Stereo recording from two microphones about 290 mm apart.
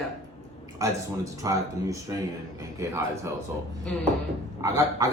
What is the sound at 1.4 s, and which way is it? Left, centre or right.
A man's voice, centre.